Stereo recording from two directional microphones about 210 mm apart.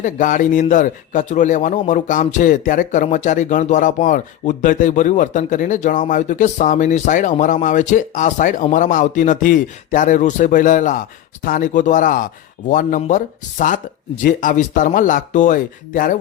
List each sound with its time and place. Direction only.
0.0 s a man's voice: 35° left (ahead or behind)